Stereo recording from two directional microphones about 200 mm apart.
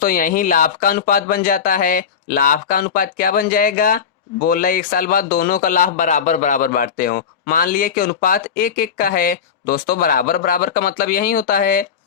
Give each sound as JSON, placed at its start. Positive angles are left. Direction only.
{"t": 0.0, "sound": "speech", "side_deg": 45}